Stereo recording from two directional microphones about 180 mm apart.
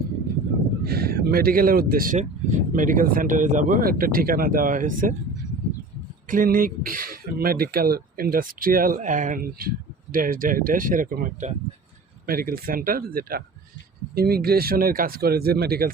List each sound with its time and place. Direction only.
0.9 s speech: 60° right (ahead or behind)
6.2 s speech: 50° right (ahead or behind)